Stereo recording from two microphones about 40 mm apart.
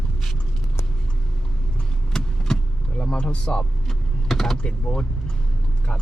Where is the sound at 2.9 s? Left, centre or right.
Left.